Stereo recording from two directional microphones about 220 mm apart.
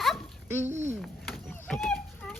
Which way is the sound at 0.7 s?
30° right (ahead or behind).